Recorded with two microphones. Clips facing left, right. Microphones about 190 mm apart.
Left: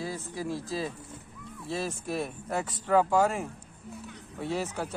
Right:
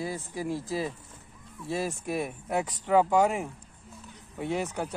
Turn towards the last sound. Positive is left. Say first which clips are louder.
# right 1 dB
turn(degrees=-15)  # may be behind; listen again after turning